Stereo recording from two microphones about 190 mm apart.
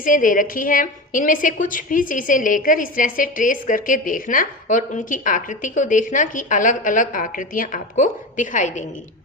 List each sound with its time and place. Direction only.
0.0 s a woman's voice: 45° left (ahead or behind)